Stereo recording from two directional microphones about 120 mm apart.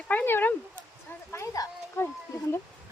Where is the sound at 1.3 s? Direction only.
25° left (ahead or behind).